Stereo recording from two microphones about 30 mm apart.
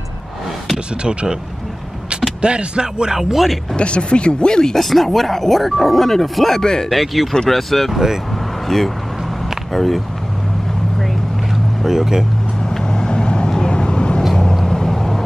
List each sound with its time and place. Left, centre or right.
2.4 s speech: right
3.7 s speech: left
4.7 s speech: centre
6.6 s speech: centre
6.9 s speech: centre
7.9 s speech: centre
8.6 s speech: centre
11.8 s speech: centre
12.6 s vehicle: left
14.3 s vehicle: centre